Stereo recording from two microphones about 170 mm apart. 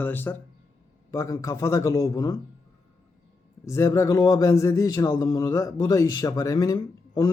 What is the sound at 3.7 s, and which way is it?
A man's voice, 15° left (ahead or behind).